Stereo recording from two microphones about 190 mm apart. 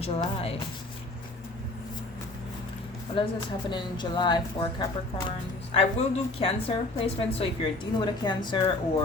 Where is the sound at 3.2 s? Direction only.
25° left (ahead or behind).